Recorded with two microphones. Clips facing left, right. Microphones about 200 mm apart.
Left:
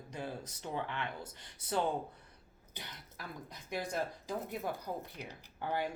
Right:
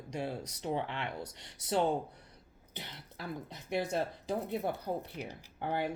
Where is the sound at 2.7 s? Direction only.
25° right (ahead or behind).